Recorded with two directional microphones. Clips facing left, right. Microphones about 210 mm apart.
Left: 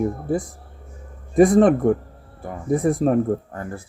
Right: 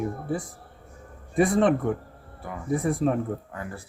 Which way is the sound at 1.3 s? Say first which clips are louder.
Left 7 dB; 45° left (ahead or behind).